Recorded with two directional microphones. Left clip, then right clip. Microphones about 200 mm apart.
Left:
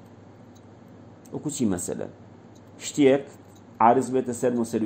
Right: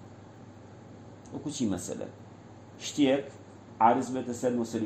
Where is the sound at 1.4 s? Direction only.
40° left (ahead or behind).